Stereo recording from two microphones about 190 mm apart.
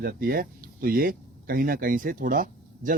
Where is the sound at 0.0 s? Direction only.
50° right (ahead or behind).